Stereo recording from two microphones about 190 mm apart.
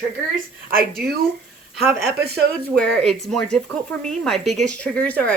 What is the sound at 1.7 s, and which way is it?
Speech, centre (ahead or behind).